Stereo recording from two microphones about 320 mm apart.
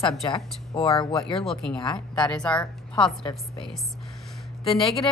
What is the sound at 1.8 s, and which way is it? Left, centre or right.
Speech, centre.